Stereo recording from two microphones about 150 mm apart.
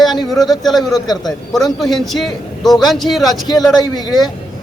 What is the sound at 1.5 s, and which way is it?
A man's voice, centre (ahead or behind).